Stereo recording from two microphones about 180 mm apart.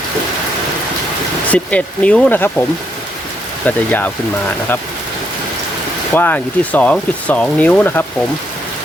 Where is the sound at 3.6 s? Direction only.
10° left (ahead or behind).